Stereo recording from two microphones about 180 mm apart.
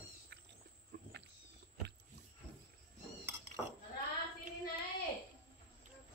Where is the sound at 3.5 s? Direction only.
45° right (ahead or behind).